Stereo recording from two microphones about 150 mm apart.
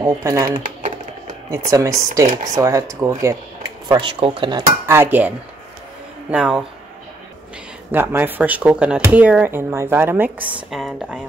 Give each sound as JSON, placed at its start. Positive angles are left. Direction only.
{"t": 0.0, "sound": "speech", "side_deg": -20}
{"t": 0.5, "sound": "typing", "side_deg": -65}
{"t": 1.5, "sound": "speech", "side_deg": -20}
{"t": 4.8, "sound": "speech", "side_deg": -15}
{"t": 6.3, "sound": "speech", "side_deg": -5}
{"t": 7.9, "sound": "speech", "side_deg": -15}